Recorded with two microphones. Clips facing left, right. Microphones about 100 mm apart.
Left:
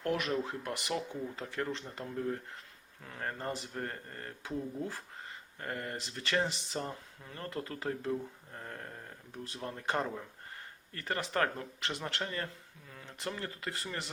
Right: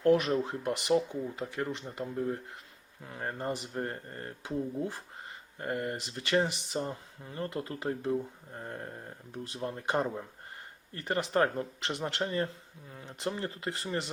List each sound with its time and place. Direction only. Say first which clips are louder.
0.0 s speech: right 7 dB; 25° right (ahead or behind)